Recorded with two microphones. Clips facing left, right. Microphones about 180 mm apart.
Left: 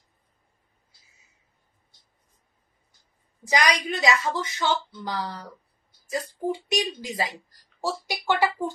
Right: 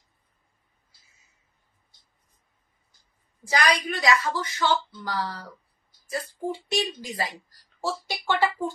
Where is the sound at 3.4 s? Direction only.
20° left (ahead or behind).